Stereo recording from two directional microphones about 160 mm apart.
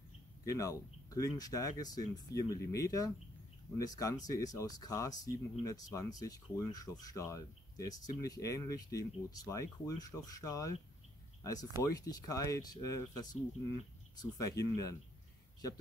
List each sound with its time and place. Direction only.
0.5 s speech: 20° left (ahead or behind)